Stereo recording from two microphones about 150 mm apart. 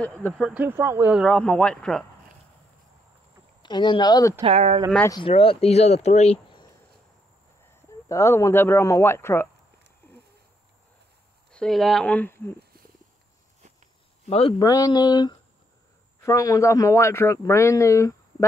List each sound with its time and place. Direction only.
0.0 s speech: 10° left (ahead or behind)
0.4 s speech: 10° right (ahead or behind)
1.1 s speech: centre (ahead or behind)
3.6 s a man's voice: 30° left (ahead or behind)
4.4 s speech: 45° right (ahead or behind)
5.3 s speech: 40° left (ahead or behind)
8.1 s speech: 20° left (ahead or behind)
11.5 s speech: 5° left (ahead or behind)
14.6 s a man's voice: 25° left (ahead or behind)